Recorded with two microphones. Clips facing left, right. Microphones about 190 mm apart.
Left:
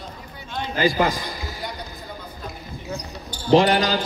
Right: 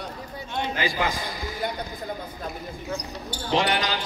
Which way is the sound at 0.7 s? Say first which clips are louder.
Left 9 dB; 40° left (ahead or behind).